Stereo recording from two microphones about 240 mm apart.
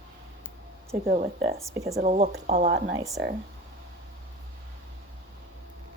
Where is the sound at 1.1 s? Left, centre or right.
Right.